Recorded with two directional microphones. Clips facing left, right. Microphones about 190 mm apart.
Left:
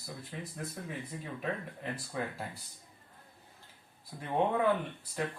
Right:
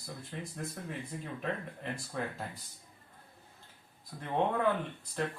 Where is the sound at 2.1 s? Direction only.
5° left (ahead or behind).